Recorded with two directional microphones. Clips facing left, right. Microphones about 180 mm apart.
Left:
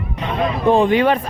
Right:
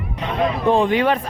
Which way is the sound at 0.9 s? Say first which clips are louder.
Left 3 dB; 25° left (ahead or behind).